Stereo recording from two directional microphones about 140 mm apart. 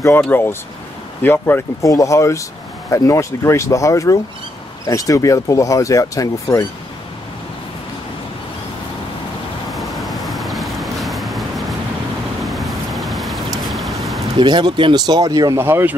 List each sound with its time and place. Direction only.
0.3 s speech: 15° left (ahead or behind)
9.7 s vehicle: centre (ahead or behind)
12.4 s a sound: centre (ahead or behind)
14.4 s speech: 30° right (ahead or behind); by 16.0 s 15° right (ahead or behind)